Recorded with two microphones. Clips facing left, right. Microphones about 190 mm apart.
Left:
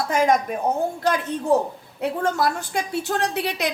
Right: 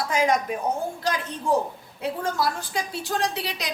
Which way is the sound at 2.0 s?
60° left (ahead or behind).